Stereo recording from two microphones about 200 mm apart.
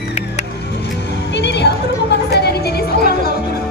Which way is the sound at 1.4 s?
55° left (ahead or behind).